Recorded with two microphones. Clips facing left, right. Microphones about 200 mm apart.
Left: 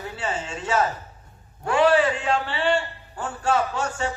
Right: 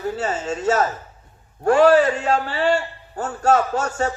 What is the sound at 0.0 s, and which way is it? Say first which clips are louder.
A man's voice: right 6 dB; 40° right (ahead or behind).